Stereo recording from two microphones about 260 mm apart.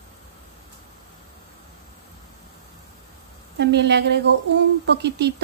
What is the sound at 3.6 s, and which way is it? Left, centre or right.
A woman's voice, right.